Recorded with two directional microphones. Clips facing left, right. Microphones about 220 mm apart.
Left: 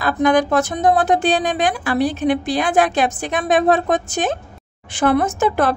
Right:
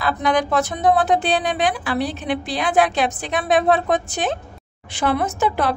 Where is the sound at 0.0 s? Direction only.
45° left (ahead or behind).